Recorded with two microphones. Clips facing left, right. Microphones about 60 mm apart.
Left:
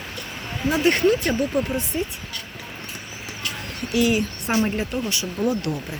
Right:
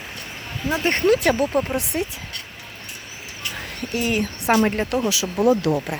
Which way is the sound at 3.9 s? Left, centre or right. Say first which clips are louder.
Left 3 dB; right.